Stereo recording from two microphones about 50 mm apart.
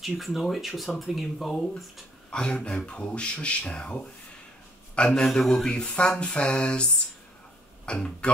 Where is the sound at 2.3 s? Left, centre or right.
Centre.